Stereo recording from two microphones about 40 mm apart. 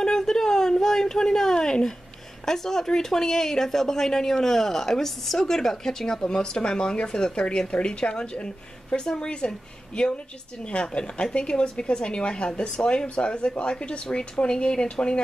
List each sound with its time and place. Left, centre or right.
0.0 s a sound: centre
2.4 s speech: centre
14.0 s speech: centre